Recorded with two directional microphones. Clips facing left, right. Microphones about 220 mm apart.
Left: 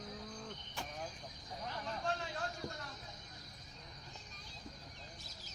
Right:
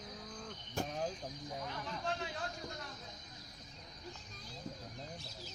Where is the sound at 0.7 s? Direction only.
45° right (ahead or behind).